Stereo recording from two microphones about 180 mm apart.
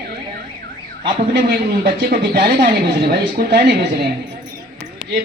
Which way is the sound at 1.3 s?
60° right (ahead or behind).